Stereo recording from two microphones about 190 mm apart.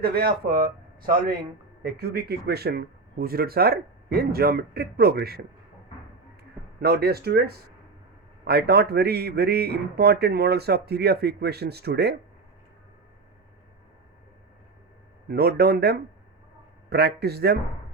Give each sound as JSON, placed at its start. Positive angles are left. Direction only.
{"t": 0.0, "sound": "speech", "side_deg": -55}
{"t": 1.8, "sound": "speech", "side_deg": -55}
{"t": 6.8, "sound": "a man's voice", "side_deg": -55}
{"t": 15.3, "sound": "a man's voice", "side_deg": -55}